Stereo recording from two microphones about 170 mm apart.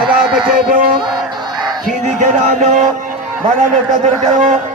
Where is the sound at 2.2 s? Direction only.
45° right (ahead or behind).